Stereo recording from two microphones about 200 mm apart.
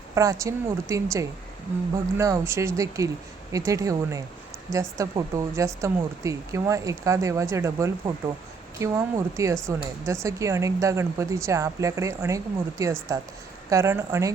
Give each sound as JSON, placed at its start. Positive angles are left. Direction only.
{"t": 0.1, "sound": "speech", "side_deg": -15}